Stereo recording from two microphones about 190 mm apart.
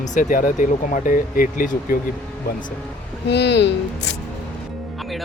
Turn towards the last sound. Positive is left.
turn(degrees=70)  # may be behind; listen again after turning